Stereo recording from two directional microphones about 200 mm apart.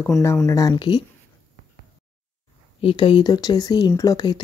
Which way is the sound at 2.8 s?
25° left (ahead or behind).